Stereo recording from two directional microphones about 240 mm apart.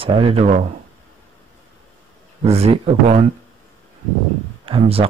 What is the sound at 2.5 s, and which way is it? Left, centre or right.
Speech, right.